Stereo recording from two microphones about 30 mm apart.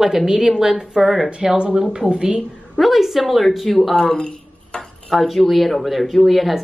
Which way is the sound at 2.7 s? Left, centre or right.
Centre.